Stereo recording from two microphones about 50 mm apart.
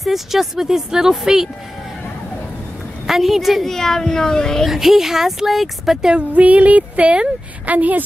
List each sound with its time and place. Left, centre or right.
0.0 s speech: centre
3.1 s speech: centre
4.6 s speech: centre
6.3 s speech: right